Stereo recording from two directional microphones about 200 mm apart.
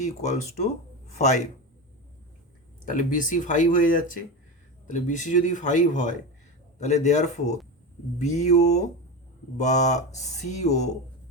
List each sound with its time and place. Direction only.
0.0 s speech: 35° left (ahead or behind)
3.0 s speech: 40° left (ahead or behind)